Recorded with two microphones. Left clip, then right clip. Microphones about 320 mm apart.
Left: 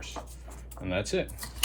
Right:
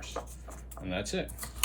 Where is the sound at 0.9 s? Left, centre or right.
Centre.